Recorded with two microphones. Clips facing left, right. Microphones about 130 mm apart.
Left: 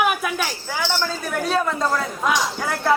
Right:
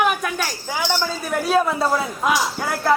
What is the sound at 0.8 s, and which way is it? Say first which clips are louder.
Speech: right 1 dB; 15° right (ahead or behind).